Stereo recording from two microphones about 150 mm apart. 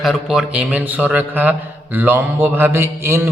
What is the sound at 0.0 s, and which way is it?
A man's voice, centre (ahead or behind).